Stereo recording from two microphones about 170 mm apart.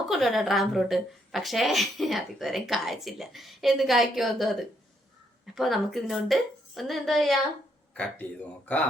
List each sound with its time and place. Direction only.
0.1 s a woman's voice: centre (ahead or behind)